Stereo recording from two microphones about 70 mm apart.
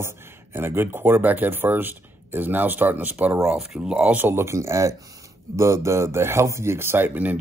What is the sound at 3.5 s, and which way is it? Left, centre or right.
Speech, centre.